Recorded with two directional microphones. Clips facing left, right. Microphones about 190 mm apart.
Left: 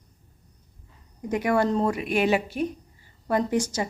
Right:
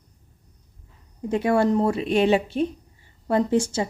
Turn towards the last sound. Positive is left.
turn(degrees=-25)  # may be behind; listen again after turning